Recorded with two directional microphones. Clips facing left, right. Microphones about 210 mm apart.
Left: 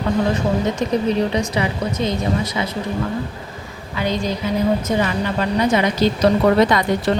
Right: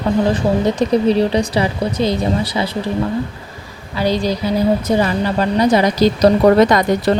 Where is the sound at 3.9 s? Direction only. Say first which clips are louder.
Right 4 dB; 35° right (ahead or behind).